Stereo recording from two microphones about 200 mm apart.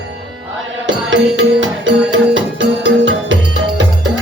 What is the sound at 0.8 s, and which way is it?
Music, 70° right (ahead or behind).